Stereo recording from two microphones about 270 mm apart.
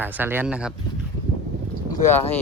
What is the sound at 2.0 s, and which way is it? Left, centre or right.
Speech, left.